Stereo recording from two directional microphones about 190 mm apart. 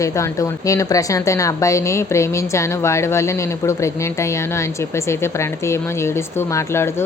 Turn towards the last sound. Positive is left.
turn(degrees=15)  # may be behind; listen again after turning